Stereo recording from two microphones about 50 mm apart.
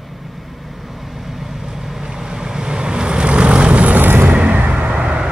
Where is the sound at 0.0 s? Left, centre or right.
Centre; by 4.0 s right.